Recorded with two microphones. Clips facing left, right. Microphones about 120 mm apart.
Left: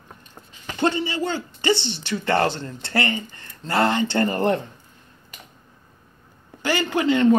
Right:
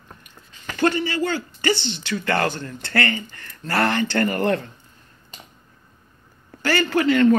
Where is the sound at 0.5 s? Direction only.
20° left (ahead or behind).